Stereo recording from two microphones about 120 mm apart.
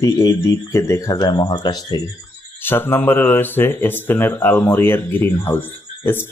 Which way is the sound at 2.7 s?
15° left (ahead or behind).